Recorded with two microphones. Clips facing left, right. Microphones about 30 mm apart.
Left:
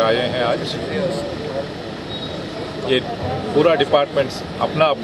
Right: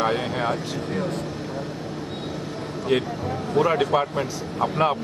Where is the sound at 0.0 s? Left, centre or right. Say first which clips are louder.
Left 6 dB; left.